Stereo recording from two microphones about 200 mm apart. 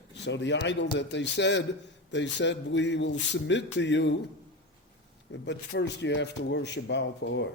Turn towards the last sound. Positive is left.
turn(degrees=60)  # may be behind; listen again after turning